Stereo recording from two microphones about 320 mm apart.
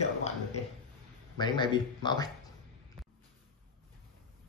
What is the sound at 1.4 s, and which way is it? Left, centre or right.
Speech, centre.